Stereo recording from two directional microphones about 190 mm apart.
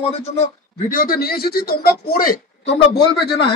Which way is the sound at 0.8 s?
50° left (ahead or behind).